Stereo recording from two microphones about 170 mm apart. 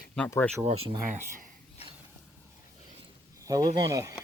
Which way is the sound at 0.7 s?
35° right (ahead or behind).